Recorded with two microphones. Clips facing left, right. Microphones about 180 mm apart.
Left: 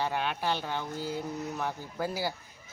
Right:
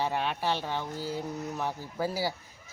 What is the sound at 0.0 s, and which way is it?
Speech, centre (ahead or behind).